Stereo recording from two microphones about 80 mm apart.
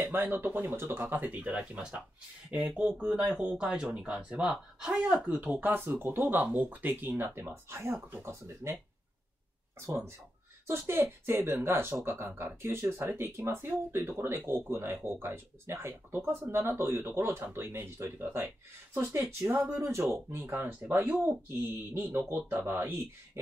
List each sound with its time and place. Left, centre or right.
0.0 s speech: right
5.4 s speech: right
9.8 s speech: right